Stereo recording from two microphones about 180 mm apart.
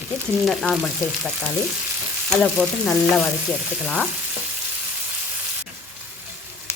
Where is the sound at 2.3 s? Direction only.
5° left (ahead or behind).